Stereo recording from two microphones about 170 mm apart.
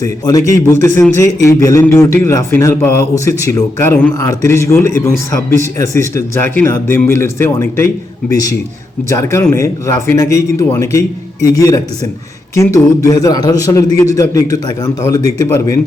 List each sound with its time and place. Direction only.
0.0 s a man's voice: 20° left (ahead or behind)